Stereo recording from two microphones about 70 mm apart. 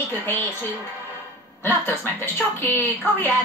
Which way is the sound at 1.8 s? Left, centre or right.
Left.